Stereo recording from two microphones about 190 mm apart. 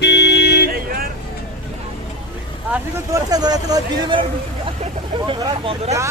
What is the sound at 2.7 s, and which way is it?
Speech, 20° right (ahead or behind).